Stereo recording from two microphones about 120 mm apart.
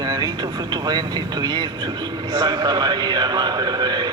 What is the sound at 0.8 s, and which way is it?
A man's voice, 35° right (ahead or behind).